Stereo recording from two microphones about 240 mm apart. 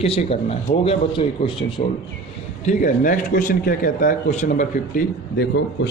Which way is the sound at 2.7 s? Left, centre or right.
Left.